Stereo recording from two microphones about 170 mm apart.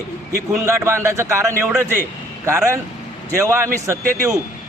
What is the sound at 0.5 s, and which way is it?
A man's voice, 15° right (ahead or behind).